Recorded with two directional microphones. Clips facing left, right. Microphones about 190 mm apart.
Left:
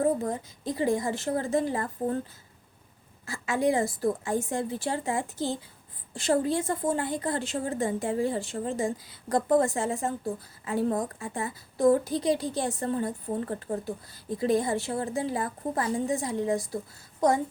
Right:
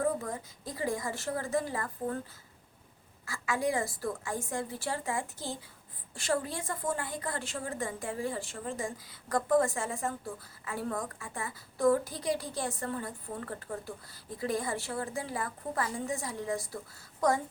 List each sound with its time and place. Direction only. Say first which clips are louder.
0.0 s a woman's voice: left 6 dB; 30° left (ahead or behind)
3.2 s a woman's voice: left 6 dB; 20° left (ahead or behind)